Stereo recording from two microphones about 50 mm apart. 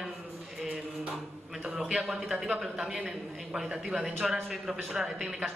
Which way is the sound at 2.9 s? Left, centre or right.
Right.